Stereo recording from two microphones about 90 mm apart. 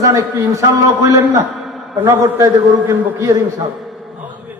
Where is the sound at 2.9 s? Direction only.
30° right (ahead or behind).